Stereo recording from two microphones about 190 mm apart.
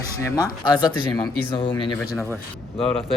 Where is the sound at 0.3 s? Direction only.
20° left (ahead or behind).